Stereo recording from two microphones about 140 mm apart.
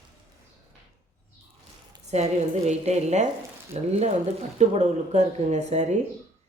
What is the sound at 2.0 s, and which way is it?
A woman's voice, 50° right (ahead or behind).